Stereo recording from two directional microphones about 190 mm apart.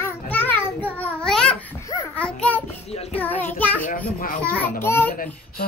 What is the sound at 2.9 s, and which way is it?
Child singing, 30° left (ahead or behind).